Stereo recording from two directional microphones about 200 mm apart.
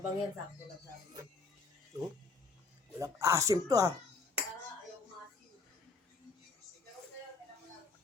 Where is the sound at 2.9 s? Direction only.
15° right (ahead or behind).